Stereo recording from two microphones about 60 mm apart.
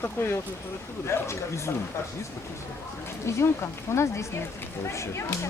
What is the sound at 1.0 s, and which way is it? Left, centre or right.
Speech, left.